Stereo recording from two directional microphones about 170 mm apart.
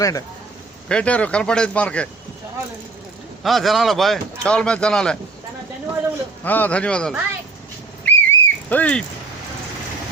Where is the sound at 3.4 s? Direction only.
Centre (ahead or behind).